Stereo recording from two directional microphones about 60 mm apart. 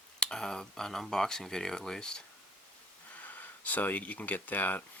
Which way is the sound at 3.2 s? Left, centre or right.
Left.